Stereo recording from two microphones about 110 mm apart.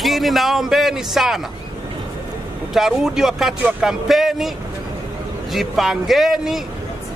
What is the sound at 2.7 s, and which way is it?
Speech, 5° right (ahead or behind).